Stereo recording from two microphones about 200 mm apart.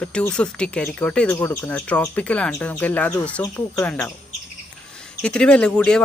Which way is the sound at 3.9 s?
5° left (ahead or behind).